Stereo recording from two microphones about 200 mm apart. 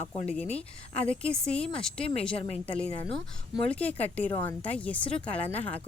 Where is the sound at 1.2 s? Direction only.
5° left (ahead or behind).